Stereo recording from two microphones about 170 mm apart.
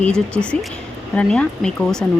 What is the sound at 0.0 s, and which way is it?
Speech, 5° left (ahead or behind).